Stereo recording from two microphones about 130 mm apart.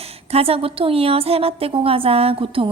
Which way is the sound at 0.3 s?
50° right (ahead or behind).